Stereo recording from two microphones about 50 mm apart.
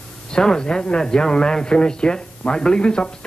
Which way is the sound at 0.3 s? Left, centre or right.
Centre.